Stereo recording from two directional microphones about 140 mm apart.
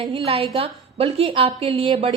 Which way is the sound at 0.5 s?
40° right (ahead or behind).